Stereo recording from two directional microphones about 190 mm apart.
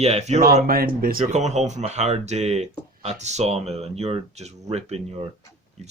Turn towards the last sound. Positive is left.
turn(degrees=-35)  # may be behind; listen again after turning